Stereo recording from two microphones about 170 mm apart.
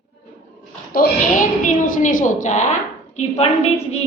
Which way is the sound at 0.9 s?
55° left (ahead or behind).